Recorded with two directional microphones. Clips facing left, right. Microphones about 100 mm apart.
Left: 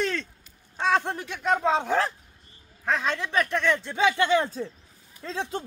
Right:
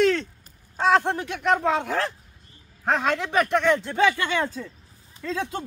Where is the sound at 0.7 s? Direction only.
55° right (ahead or behind).